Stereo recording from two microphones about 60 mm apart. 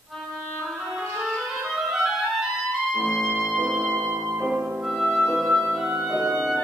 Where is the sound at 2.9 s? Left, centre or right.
Centre.